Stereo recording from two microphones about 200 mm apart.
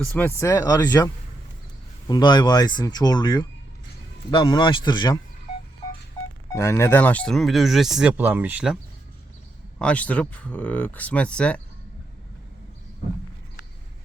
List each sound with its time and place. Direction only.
0.1 s speech: 10° left (ahead or behind)
6.5 s speech: 15° left (ahead or behind); by 8.8 s 5° right (ahead or behind)
9.7 s speech: 5° left (ahead or behind)